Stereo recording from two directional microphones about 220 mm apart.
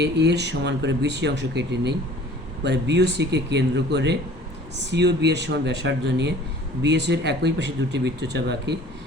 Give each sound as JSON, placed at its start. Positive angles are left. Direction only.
{"t": 0.0, "sound": "speech", "side_deg": -50}